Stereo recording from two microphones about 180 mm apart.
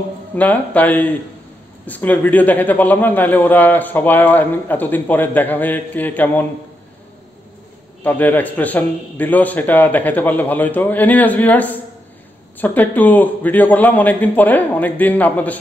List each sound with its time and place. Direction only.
0.4 s a man's voice: 10° left (ahead or behind)
8.0 s a man's voice: 10° left (ahead or behind)